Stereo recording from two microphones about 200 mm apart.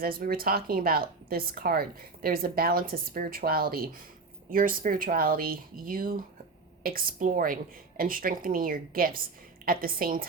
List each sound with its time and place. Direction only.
0.0 s speech: 50° right (ahead or behind)